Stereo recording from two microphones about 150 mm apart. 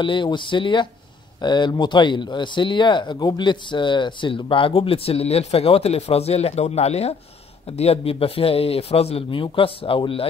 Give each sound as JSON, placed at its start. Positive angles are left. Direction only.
{"t": 0.0, "sound": "speech", "side_deg": 30}